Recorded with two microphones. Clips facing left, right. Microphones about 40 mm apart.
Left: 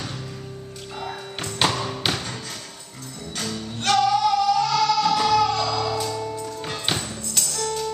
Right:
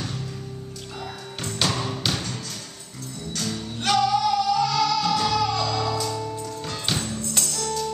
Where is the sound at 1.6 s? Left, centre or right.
Centre.